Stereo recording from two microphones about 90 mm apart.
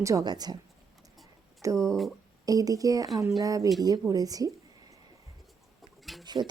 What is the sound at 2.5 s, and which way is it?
Speech, 40° right (ahead or behind).